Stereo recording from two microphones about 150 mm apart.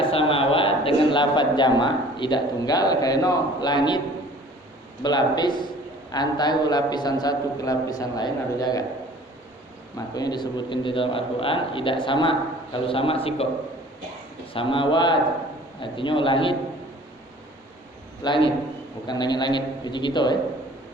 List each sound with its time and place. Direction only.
0.0 s a man's voice: 35° left (ahead or behind)
5.0 s a man's voice: 30° left (ahead or behind)
10.2 s a man's voice: 30° left (ahead or behind)
14.5 s a man's voice: 35° left (ahead or behind)
18.2 s a man's voice: 35° left (ahead or behind)